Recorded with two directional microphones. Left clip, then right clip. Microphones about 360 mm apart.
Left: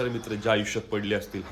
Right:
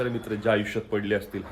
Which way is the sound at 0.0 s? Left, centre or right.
Centre.